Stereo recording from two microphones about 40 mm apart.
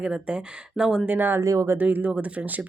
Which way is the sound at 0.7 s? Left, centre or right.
Centre.